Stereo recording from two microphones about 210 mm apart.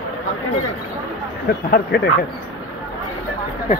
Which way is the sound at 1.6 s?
50° left (ahead or behind).